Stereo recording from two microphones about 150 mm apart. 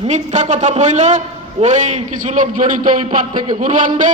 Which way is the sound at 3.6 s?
55° right (ahead or behind).